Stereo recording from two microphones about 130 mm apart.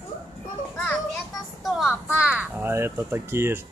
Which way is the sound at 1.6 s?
Centre (ahead or behind).